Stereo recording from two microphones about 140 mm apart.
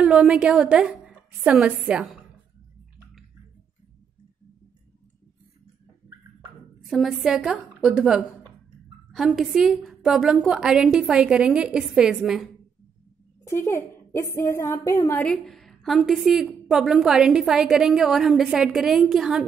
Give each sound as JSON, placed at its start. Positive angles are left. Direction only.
{"t": 0.0, "sound": "a woman's voice", "side_deg": -5}
{"t": 6.9, "sound": "a woman's voice", "side_deg": 0}
{"t": 13.4, "sound": "a woman's voice", "side_deg": 15}
{"t": 15.2, "sound": "a sound", "side_deg": 5}
{"t": 16.1, "sound": "a woman's voice", "side_deg": 0}